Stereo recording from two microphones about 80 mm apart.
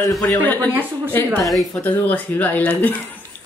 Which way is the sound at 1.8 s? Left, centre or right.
Left.